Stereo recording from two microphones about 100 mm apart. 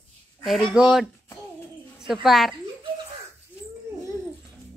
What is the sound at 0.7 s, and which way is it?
Speech, 5° right (ahead or behind).